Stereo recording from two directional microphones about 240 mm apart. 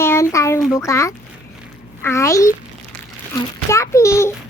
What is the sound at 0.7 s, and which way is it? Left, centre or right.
A child's voice, centre.